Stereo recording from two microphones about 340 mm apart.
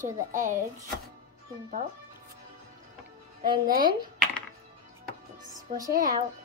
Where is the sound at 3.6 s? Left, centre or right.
Right.